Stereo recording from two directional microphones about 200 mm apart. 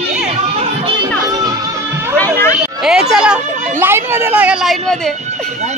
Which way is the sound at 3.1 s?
5° right (ahead or behind).